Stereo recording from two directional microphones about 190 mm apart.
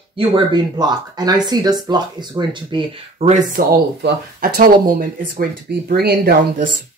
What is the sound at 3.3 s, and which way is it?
Speech, 45° right (ahead or behind).